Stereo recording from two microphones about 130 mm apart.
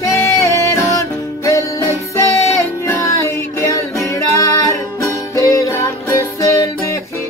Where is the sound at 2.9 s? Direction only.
20° left (ahead or behind).